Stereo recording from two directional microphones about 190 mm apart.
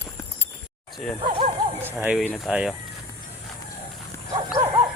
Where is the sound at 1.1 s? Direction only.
30° right (ahead or behind).